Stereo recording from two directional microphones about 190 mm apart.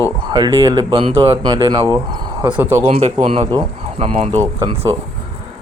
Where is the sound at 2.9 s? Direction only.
35° right (ahead or behind).